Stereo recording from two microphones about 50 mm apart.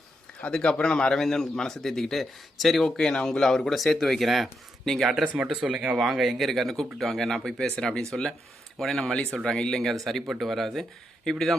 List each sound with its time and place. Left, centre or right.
0.5 s a man's voice: centre
5.2 s speech: right
6.0 s a man's voice: centre